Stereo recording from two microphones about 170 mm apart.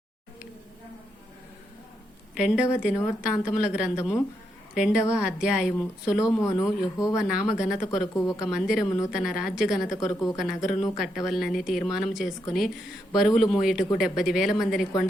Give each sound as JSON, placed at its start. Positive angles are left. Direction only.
{"t": 2.3, "sound": "speech", "side_deg": -5}
{"t": 6.1, "sound": "speech", "side_deg": 20}
{"t": 7.2, "sound": "speech", "side_deg": -5}
{"t": 8.0, "sound": "a woman's voice", "side_deg": 20}
{"t": 8.4, "sound": "speech", "side_deg": 0}